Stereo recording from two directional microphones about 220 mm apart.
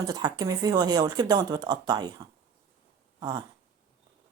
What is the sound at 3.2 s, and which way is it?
Dog, 20° right (ahead or behind).